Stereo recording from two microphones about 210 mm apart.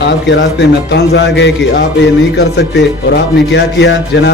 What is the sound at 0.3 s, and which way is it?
Speech, 55° left (ahead or behind).